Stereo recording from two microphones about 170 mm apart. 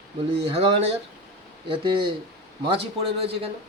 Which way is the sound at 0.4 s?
35° right (ahead or behind).